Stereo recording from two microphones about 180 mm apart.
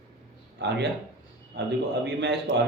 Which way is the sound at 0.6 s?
70° right (ahead or behind).